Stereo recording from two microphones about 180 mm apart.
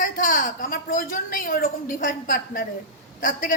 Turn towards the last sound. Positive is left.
turn(degrees=45)  # may be behind; listen again after turning